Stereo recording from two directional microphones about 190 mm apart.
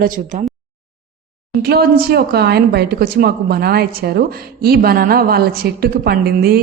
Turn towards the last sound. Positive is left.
turn(degrees=-50)  # may be behind; listen again after turning